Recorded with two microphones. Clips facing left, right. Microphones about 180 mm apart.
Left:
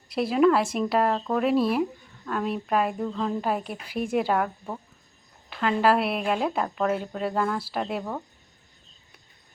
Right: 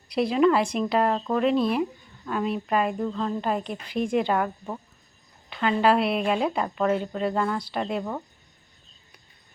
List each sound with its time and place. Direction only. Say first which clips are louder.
0.1 s speech: even; centre (ahead or behind)